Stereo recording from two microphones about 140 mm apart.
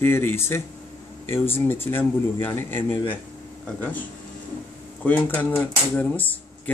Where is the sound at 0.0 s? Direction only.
15° left (ahead or behind).